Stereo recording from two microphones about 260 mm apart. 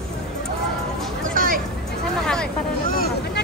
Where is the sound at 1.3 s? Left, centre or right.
Right.